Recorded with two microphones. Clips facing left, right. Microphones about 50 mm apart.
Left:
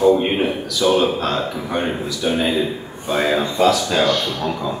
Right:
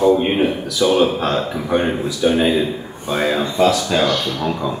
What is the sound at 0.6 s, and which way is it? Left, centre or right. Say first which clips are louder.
Speech: even; centre.